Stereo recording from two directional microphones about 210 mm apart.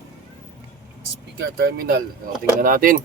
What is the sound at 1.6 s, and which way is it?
Speech, 50° right (ahead or behind).